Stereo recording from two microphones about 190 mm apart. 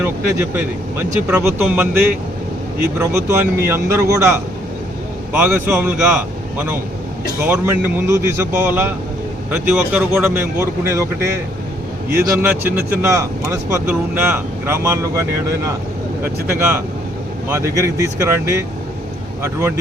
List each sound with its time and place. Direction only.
0.5 s speech: 10° right (ahead or behind)
3.0 s speech: 15° right (ahead or behind)